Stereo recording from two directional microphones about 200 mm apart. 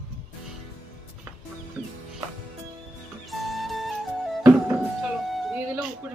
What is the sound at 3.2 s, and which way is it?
Music, centre (ahead or behind).